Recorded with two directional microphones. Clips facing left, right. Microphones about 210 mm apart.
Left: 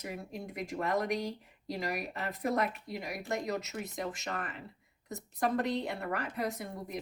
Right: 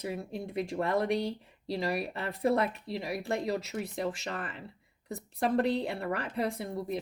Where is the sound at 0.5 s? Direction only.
30° right (ahead or behind).